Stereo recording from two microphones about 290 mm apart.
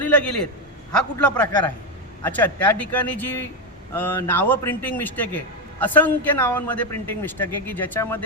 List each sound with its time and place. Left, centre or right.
0.0 s a man's voice: centre